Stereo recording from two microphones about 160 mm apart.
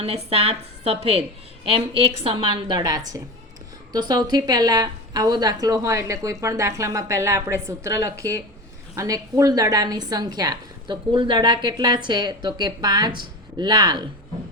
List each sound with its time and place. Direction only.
0.0 s a woman's voice: 40° right (ahead or behind); by 7.9 s 15° right (ahead or behind)
9.0 s a woman's voice: 20° right (ahead or behind)